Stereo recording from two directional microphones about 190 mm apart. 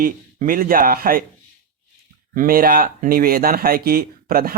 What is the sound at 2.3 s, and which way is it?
Speech, 45° right (ahead or behind).